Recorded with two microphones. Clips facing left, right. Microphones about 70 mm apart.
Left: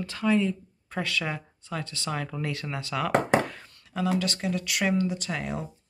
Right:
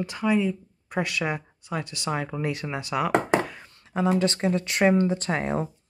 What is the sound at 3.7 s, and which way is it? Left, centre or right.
Speech, right.